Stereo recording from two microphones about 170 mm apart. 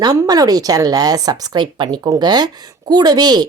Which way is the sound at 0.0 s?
20° right (ahead or behind).